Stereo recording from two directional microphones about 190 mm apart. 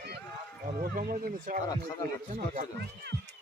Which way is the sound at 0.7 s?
45° right (ahead or behind).